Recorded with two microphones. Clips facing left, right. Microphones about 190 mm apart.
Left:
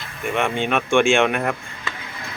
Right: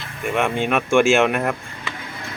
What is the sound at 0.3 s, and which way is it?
Speech, 5° right (ahead or behind).